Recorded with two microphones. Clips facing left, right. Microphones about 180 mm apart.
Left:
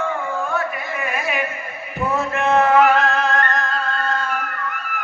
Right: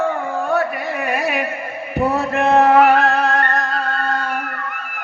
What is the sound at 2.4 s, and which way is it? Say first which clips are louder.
Chant: right 3 dB; 35° right (ahead or behind).